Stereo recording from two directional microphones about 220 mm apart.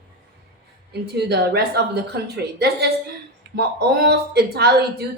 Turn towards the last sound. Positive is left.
turn(degrees=-45)  # may be behind; listen again after turning